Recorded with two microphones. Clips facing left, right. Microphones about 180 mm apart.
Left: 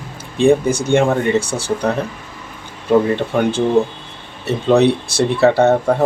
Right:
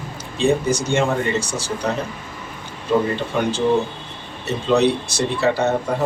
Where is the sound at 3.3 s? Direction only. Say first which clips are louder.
Left 4 dB; 50° left (ahead or behind).